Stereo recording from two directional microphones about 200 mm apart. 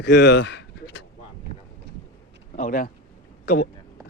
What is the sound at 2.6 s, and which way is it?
Speech, 45° left (ahead or behind).